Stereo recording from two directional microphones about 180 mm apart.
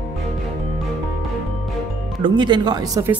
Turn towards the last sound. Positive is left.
turn(degrees=-20)  # may be behind; listen again after turning